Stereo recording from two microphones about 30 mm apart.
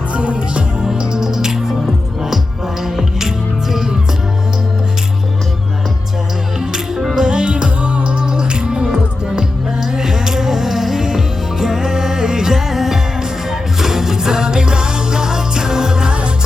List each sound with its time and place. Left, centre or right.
0.1 s music: right
0.9 s music: right
2.8 s music: centre
6.6 s music: centre
7.3 s music: right; by 11.0 s centre
11.6 s music: centre